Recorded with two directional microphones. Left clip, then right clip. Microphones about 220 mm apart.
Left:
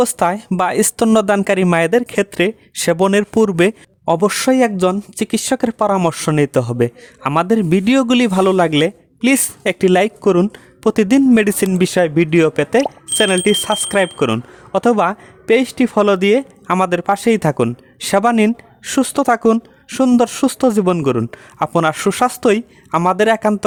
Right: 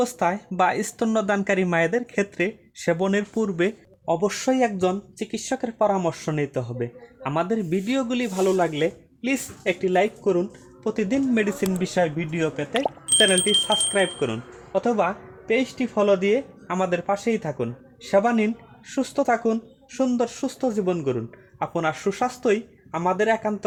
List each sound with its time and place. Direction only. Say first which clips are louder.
0.0 s speech: left 8 dB; 50° left (ahead or behind)
13.3 s speech: left 6 dB; centre (ahead or behind)
13.7 s speech: left 6 dB; 50° left (ahead or behind)